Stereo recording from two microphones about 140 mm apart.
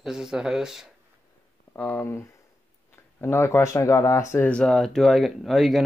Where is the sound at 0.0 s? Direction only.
5° right (ahead or behind).